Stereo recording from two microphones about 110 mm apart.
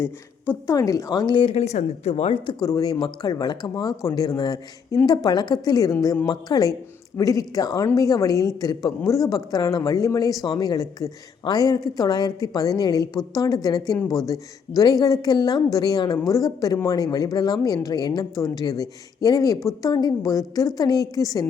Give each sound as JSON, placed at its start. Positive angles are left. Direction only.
{"t": 0.0, "sound": "a woman's voice", "side_deg": 20}
{"t": 0.8, "sound": "speech", "side_deg": 30}
{"t": 1.7, "sound": "speech", "side_deg": 80}
{"t": 2.5, "sound": "speech", "side_deg": 35}